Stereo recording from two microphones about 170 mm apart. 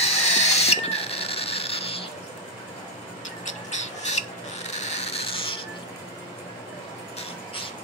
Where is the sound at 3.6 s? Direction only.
40° left (ahead or behind).